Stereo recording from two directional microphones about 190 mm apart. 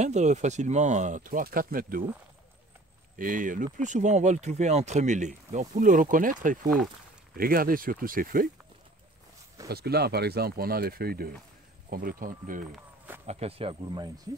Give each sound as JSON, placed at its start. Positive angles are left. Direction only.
{"t": 0.0, "sound": "speech", "side_deg": -35}
{"t": 3.2, "sound": "speech", "side_deg": -45}
{"t": 9.7, "sound": "speech", "side_deg": -55}
{"t": 12.7, "sound": "walk", "side_deg": -10}
{"t": 13.3, "sound": "speech", "side_deg": -30}